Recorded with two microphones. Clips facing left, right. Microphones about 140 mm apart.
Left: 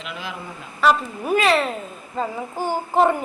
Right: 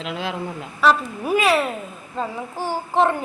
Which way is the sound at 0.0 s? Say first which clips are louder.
Right 5 dB; 90° right.